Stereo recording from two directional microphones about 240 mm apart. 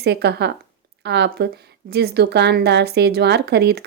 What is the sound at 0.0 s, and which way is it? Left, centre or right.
Speech, right.